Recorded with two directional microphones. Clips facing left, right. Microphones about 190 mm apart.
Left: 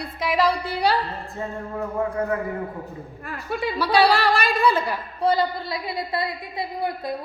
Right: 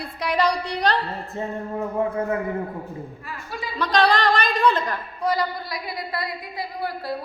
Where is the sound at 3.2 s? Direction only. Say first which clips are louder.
Left 10 dB; 60° left (ahead or behind).